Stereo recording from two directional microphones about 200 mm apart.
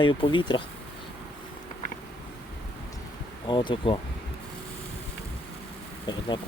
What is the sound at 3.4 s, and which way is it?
Speech, 25° left (ahead or behind).